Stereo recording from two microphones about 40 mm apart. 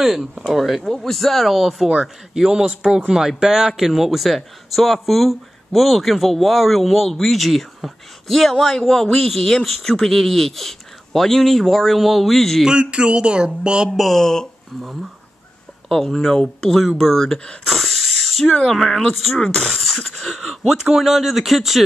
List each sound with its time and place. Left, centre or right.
0.0 s speech: centre
12.6 s speech: right
13.9 s speech: centre
14.2 s speech: centre
15.9 s speech: centre
17.6 s a sound: centre
18.7 s speech: centre
19.4 s speech: left
19.7 s a sound: centre
20.2 s speech: centre